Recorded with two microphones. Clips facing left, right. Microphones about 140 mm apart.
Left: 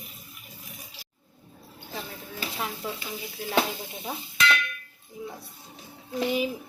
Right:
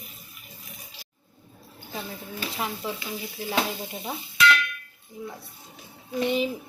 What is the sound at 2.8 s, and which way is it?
Speech, centre (ahead or behind).